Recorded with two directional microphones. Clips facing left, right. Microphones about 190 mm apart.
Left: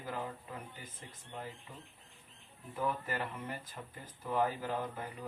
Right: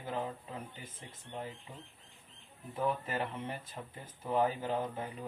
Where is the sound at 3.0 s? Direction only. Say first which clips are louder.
Right 2 dB; 20° right (ahead or behind).